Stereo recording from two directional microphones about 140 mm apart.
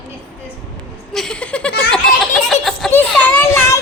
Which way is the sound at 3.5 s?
20° left (ahead or behind).